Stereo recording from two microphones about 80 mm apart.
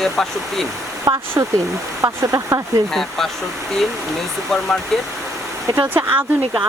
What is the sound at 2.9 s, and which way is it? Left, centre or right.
Speech, centre.